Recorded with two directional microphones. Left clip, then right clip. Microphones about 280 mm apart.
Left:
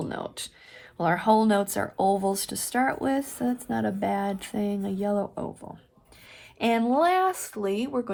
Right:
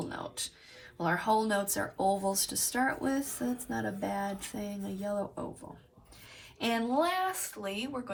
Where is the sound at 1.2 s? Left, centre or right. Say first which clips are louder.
Left 7 dB; left.